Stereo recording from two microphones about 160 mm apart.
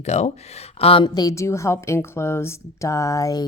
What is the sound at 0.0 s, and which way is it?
Speech, 45° left (ahead or behind).